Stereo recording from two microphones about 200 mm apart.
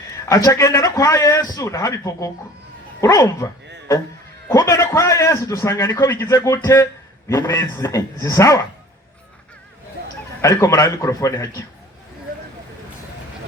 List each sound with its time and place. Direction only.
0.3 s a man's voice: 15° left (ahead or behind)
10.0 s a sound: 55° right (ahead or behind)
10.4 s a man's voice: 15° left (ahead or behind)